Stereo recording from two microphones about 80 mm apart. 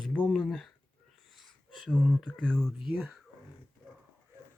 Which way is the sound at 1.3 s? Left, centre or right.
Centre.